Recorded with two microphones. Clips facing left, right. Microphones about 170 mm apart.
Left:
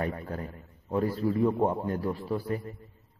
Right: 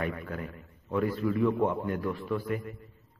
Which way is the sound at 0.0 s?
35° left (ahead or behind).